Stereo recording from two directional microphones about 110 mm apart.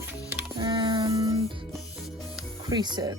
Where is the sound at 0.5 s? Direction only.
40° right (ahead or behind).